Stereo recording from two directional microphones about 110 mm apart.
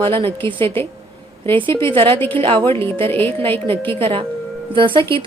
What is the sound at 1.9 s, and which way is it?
Speech, 55° right (ahead or behind).